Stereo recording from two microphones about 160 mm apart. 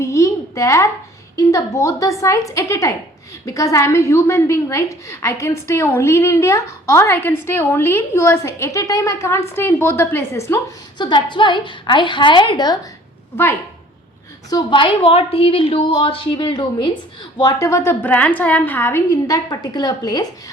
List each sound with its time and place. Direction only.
0.0 s a sound: 20° left (ahead or behind)
1.4 s a woman's voice: 20° left (ahead or behind)
11.0 s a woman's voice: 30° left (ahead or behind)
13.3 s a woman's voice: 15° left (ahead or behind)
14.5 s a woman's voice: 30° left (ahead or behind)